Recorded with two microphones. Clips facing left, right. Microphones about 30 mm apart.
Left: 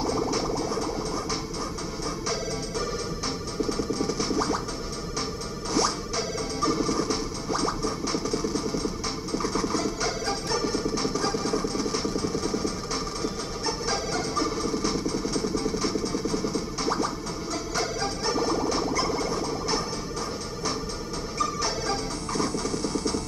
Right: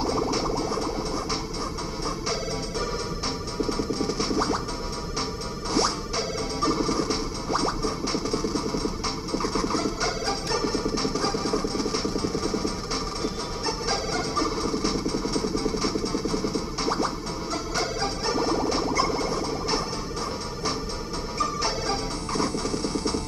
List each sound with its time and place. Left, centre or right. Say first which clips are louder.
0.6 s music: right 1 dB; right
3.7 s music: right 1 dB; right
5.7 s music: right 1 dB; right
18.9 s a sound: right 2 dB; centre
21.4 s music: right 1 dB; right